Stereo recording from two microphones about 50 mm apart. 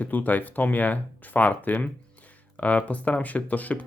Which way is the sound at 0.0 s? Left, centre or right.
Left.